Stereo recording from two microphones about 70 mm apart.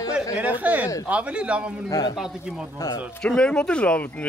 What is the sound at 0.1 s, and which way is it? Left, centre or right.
Speech, right.